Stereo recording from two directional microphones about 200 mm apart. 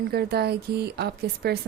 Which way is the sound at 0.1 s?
50° right (ahead or behind).